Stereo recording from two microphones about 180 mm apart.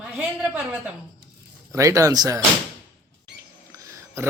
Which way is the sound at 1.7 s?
15° right (ahead or behind).